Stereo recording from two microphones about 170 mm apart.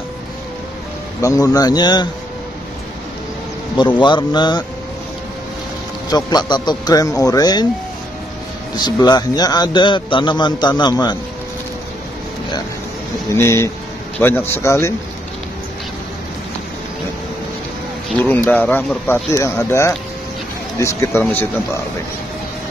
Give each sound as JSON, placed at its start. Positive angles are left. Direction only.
{"t": 1.2, "sound": "a man's voice", "side_deg": 20}
{"t": 3.7, "sound": "a man's voice", "side_deg": 25}
{"t": 6.0, "sound": "a man's voice", "side_deg": 25}
{"t": 8.7, "sound": "a man's voice", "side_deg": 25}
{"t": 13.3, "sound": "speech", "side_deg": 15}
{"t": 18.2, "sound": "speech", "side_deg": 10}